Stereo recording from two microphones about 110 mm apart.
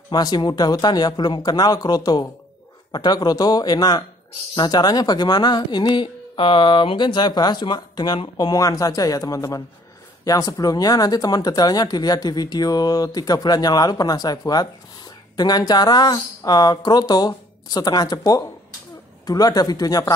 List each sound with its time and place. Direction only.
0.1 s speech: 40° left (ahead or behind)